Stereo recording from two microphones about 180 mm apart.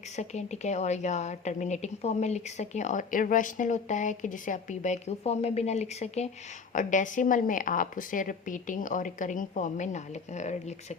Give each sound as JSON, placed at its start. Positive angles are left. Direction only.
{"t": 0.2, "sound": "a woman's voice", "side_deg": 40}